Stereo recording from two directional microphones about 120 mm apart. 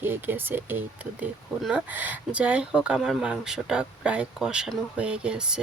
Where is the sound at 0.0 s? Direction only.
15° right (ahead or behind).